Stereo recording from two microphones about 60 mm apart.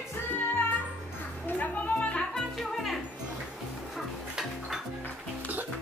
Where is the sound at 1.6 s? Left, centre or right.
Left.